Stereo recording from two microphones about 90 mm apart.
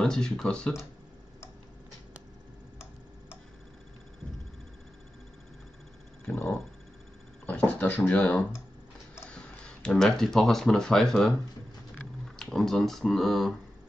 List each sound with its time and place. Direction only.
0.0 s speech: 5° left (ahead or behind)
6.3 s a sound: 25° left (ahead or behind)
7.4 s speech: 15° left (ahead or behind)
12.4 s speech: 5° left (ahead or behind)